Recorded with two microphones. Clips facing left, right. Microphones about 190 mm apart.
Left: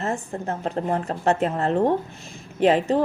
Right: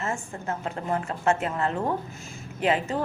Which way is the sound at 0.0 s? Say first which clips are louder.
Left 4 dB; 35° left (ahead or behind).